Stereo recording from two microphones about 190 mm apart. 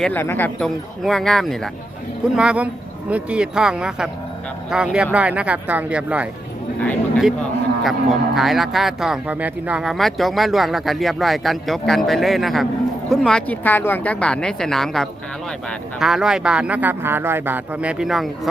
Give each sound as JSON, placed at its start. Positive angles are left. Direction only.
{"t": 0.0, "sound": "speech", "side_deg": 10}